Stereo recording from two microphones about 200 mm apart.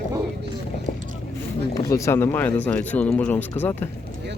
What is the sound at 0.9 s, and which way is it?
Vehicle, 50° left (ahead or behind).